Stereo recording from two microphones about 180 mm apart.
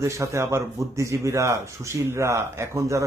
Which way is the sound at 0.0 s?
15° right (ahead or behind).